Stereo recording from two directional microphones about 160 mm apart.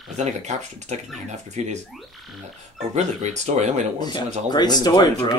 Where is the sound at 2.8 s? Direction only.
45° right (ahead or behind).